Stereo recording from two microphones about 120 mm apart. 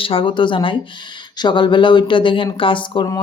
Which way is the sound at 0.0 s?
50° left (ahead or behind).